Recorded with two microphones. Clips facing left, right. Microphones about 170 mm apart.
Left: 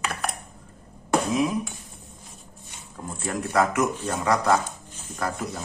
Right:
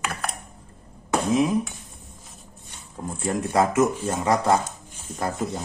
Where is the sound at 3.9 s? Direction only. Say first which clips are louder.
Right 2 dB; 15° right (ahead or behind).